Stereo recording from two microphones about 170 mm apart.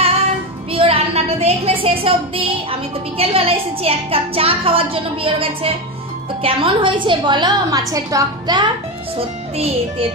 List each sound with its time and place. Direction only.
0.7 s a woman's voice: 35° right (ahead or behind)
9.1 s speech: 35° right (ahead or behind)